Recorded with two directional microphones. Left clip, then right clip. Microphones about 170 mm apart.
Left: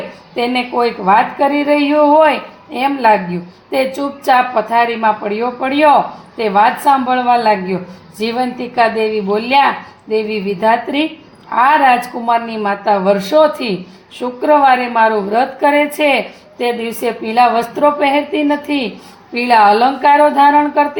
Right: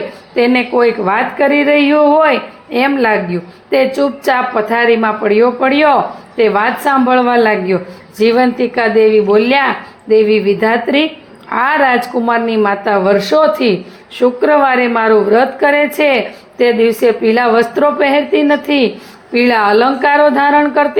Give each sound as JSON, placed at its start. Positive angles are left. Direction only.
{"t": 0.3, "sound": "a woman's voice", "side_deg": -15}